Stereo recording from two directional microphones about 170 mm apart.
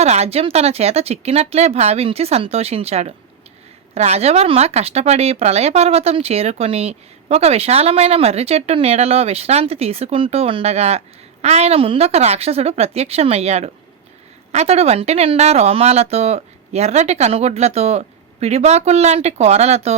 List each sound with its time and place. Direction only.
0.0 s speech: 40° right (ahead or behind)